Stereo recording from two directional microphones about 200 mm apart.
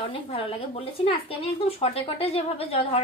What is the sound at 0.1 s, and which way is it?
A woman's voice, 25° left (ahead or behind).